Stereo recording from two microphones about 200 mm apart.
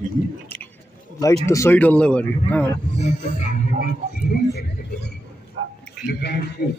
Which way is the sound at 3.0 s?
35° left (ahead or behind).